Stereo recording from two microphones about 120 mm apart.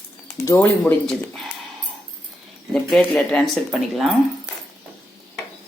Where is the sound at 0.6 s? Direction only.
15° left (ahead or behind).